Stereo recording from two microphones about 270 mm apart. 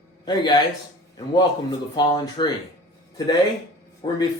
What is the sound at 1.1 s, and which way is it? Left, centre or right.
A man's voice, centre.